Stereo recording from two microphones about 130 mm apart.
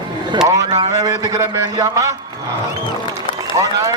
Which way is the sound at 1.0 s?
25° right (ahead or behind).